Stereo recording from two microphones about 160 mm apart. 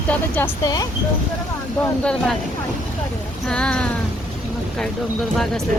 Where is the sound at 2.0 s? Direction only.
5° left (ahead or behind).